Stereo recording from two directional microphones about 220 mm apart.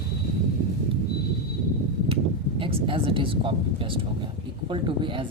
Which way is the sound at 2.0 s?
25° right (ahead or behind).